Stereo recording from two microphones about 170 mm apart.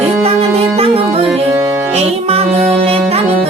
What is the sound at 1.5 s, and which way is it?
Music, 15° right (ahead or behind).